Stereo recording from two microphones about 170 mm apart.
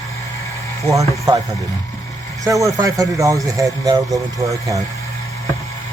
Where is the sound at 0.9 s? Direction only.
20° right (ahead or behind).